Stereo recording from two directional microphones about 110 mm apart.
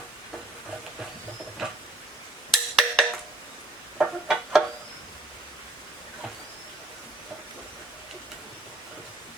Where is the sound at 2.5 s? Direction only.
5° left (ahead or behind).